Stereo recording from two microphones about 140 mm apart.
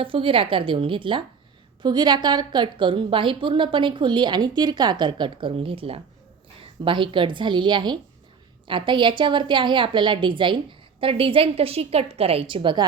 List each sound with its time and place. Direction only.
0.0 s a woman's voice: 40° right (ahead or behind)